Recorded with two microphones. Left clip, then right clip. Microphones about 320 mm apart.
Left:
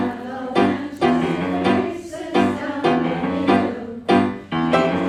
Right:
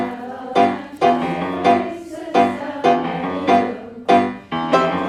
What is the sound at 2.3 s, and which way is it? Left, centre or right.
Music, centre.